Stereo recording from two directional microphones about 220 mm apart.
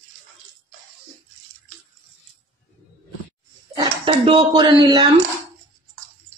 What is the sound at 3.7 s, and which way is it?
Speech, 25° right (ahead or behind).